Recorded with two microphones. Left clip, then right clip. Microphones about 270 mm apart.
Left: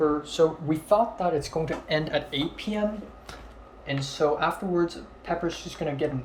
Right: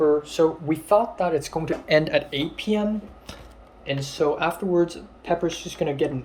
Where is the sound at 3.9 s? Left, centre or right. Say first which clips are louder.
Right 2 dB; centre.